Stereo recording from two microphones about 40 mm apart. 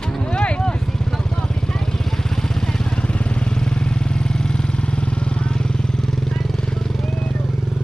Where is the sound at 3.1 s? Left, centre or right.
Left.